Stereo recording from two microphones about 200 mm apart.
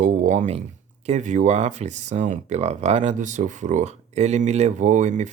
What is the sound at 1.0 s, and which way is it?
Speech, 35° right (ahead or behind).